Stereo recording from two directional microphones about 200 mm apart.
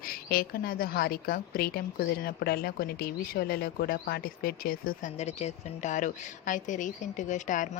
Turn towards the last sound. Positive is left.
turn(degrees=40)  # may be behind; listen again after turning